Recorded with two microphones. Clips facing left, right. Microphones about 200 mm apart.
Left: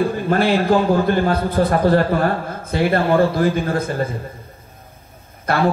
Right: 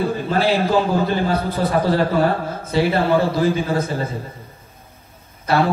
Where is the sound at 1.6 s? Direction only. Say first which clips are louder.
Left 3 dB; 55° left (ahead or behind).